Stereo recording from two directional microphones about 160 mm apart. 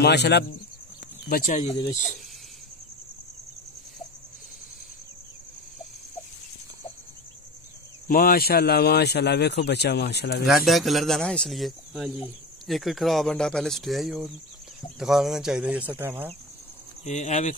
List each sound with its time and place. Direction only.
0.0 s speech: 90° left
1.3 s speech: 55° left (ahead or behind)
8.1 s speech: 70° left (ahead or behind); by 10.4 s 90° left
10.4 s speech: centre (ahead or behind)
17.0 s speech: 45° left (ahead or behind)